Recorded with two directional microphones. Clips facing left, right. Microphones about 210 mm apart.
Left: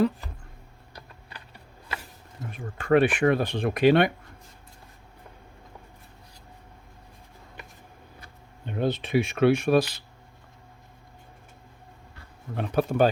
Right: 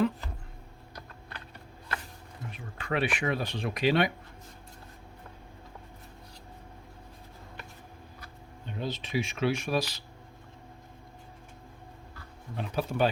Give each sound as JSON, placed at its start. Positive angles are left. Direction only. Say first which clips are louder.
{"t": 2.5, "sound": "speech", "louder": "left 12 dB", "side_deg": 50}
{"t": 8.6, "sound": "speech", "louder": "left 8 dB", "side_deg": 60}
{"t": 12.5, "sound": "speech", "louder": "left 6 dB", "side_deg": 55}